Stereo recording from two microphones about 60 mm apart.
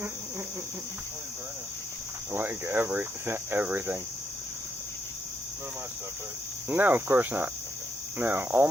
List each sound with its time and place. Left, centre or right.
2.3 s cricket: right
6.7 s cricket: right